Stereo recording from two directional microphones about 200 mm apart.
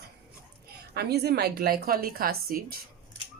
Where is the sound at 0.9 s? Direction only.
55° right (ahead or behind).